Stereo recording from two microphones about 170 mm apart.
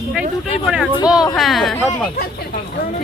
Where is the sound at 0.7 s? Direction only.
5° right (ahead or behind).